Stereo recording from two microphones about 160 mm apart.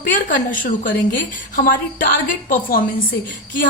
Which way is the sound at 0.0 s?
55° left (ahead or behind).